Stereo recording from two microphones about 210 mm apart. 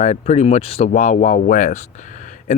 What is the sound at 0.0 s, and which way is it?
Speech, 35° left (ahead or behind).